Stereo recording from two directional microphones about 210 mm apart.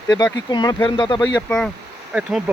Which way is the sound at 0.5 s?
20° left (ahead or behind).